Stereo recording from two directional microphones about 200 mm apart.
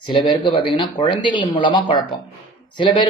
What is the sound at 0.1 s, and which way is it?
Speech, 25° left (ahead or behind).